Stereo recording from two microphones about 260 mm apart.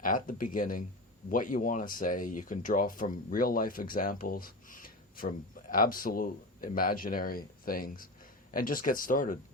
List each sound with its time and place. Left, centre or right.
0.0 s speech: left